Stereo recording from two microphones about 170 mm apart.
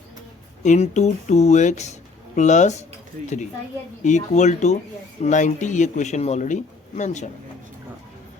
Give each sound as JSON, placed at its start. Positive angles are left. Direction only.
{"t": 0.6, "sound": "speech", "side_deg": 45}
{"t": 4.0, "sound": "speech", "side_deg": 45}